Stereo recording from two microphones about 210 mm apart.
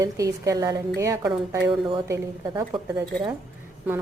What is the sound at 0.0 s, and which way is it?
Speech, 15° right (ahead or behind).